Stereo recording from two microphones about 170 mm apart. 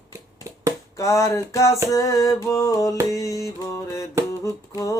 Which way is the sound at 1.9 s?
20° left (ahead or behind).